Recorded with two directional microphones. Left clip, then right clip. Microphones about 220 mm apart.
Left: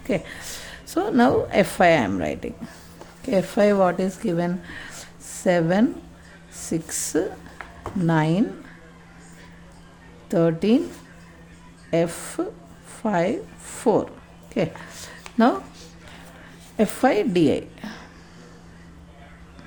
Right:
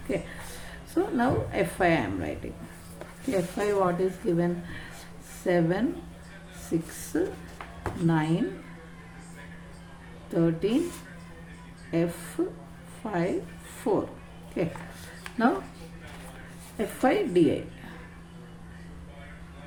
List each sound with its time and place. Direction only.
0.1 s a woman's voice: 50° left (ahead or behind)
10.2 s a woman's voice: 45° left (ahead or behind)
11.9 s a woman's voice: 45° left (ahead or behind)
14.5 s a sound: 50° left (ahead or behind)
16.7 s a woman's voice: 50° left (ahead or behind)